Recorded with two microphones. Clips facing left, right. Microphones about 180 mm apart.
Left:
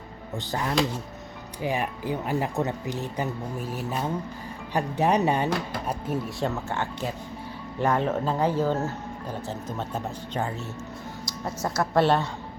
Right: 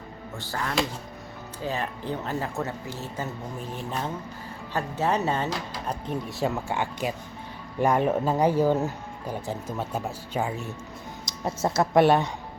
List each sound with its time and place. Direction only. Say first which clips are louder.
0.3 s speech: left 3 dB; 20° left (ahead or behind)
5.5 s speech: left 4 dB; 55° left (ahead or behind)
5.8 s speech: left 2 dB; 5° left (ahead or behind)
6.4 s speech: right 1 dB; 10° right (ahead or behind)
11.3 s speech: right 4 dB; 25° right (ahead or behind)